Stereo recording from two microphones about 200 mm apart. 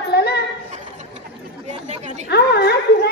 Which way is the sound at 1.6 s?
35° right (ahead or behind).